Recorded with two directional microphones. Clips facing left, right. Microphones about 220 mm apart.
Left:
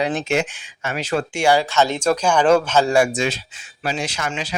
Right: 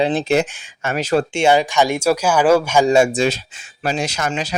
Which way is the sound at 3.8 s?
45° right (ahead or behind).